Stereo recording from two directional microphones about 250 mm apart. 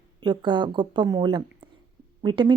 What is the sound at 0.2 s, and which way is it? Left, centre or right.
Speech, centre.